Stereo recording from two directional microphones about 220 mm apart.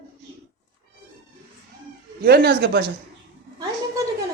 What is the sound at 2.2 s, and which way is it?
Speech, 45° right (ahead or behind).